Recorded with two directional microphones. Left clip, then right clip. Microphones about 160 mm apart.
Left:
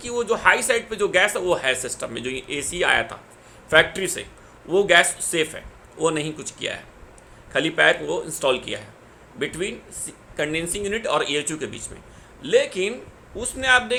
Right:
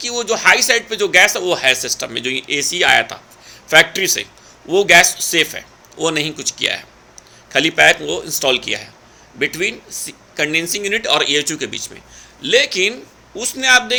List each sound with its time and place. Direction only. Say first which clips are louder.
0.1 s speech: right 5 dB; 15° right (ahead or behind)